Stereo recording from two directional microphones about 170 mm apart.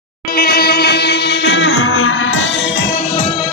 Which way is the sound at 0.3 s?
65° left (ahead or behind).